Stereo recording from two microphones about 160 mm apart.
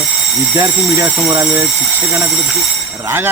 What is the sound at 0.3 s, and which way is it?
A man's voice, 20° right (ahead or behind).